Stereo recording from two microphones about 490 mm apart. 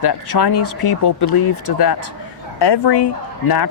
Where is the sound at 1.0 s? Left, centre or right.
Left.